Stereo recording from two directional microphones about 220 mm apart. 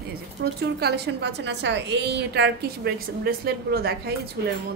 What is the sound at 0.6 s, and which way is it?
A woman's voice, 50° right (ahead or behind).